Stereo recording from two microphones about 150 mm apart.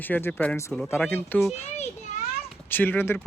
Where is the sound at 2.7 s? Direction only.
10° left (ahead or behind).